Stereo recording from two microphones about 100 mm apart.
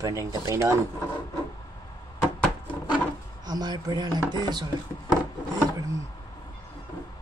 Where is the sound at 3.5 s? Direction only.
45° right (ahead or behind).